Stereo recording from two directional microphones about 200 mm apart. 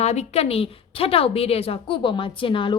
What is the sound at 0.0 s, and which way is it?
A woman's voice, 35° left (ahead or behind).